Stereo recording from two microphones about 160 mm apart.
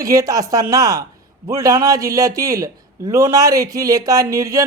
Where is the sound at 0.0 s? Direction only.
20° right (ahead or behind).